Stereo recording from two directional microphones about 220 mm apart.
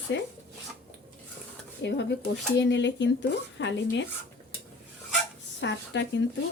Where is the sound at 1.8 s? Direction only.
50° left (ahead or behind).